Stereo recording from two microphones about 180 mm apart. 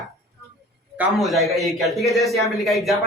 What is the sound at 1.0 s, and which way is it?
Speech, centre (ahead or behind).